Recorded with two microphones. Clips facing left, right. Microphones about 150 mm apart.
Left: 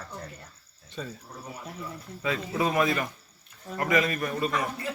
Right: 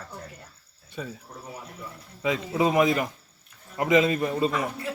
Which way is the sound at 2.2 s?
20° right (ahead or behind).